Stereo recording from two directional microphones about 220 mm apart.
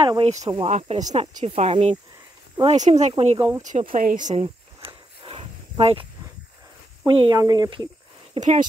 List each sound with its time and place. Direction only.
0.0 s speech: 25° right (ahead or behind)
3.6 s a sound: 35° right (ahead or behind)
7.1 s speech: 20° right (ahead or behind)